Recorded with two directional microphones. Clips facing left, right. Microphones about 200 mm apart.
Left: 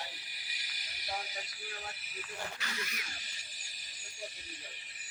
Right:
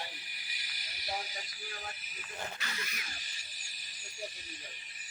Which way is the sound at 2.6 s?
25° right (ahead or behind).